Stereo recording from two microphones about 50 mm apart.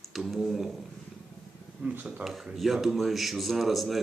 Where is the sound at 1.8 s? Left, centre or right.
Right.